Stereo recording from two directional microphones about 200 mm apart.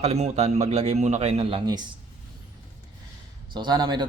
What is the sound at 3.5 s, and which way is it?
Speech, 20° right (ahead or behind).